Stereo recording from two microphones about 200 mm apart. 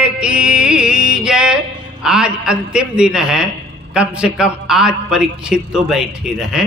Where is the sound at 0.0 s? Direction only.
5° right (ahead or behind).